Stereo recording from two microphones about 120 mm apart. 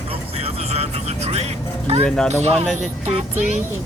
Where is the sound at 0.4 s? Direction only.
55° right (ahead or behind).